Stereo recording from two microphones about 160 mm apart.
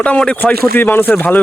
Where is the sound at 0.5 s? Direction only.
70° right (ahead or behind).